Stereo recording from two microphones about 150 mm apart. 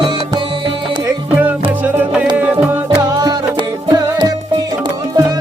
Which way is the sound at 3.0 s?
25° right (ahead or behind).